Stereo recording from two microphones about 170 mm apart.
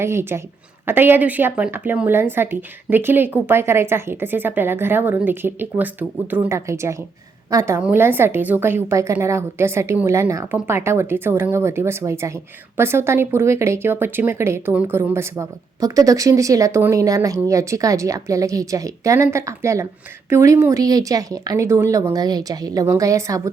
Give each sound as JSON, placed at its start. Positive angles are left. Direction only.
{"t": 0.0, "sound": "a woman's voice", "side_deg": -15}